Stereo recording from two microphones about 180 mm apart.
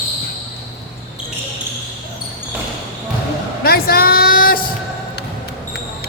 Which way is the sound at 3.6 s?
55° left (ahead or behind).